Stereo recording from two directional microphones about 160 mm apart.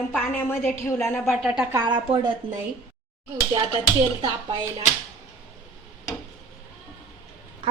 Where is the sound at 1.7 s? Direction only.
30° right (ahead or behind).